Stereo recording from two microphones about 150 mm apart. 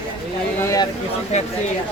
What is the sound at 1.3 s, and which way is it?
Speech, 45° left (ahead or behind).